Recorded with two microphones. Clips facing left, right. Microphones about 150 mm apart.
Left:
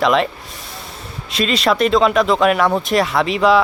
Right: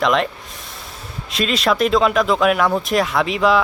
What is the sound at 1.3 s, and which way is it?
Speech, centre (ahead or behind).